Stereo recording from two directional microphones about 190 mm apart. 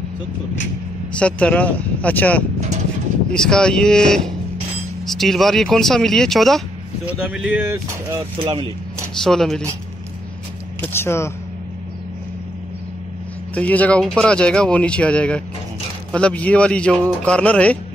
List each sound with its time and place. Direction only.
1.1 s speech: 5° left (ahead or behind); by 8.2 s 15° right (ahead or behind)
8.4 s speech: 25° right (ahead or behind)
9.2 s speech: centre (ahead or behind)
10.8 s speech: 10° left (ahead or behind)
13.6 s speech: 5° left (ahead or behind)